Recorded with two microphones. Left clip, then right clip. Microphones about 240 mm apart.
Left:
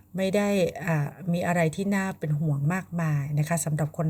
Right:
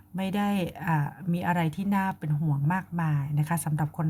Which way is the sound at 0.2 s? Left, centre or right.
Right.